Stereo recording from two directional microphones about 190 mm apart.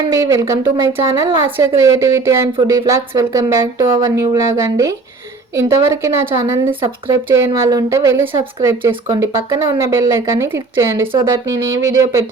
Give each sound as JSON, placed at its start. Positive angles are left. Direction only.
{"t": 0.1, "sound": "a woman's voice", "side_deg": -15}
{"t": 11.0, "sound": "a woman's voice", "side_deg": -25}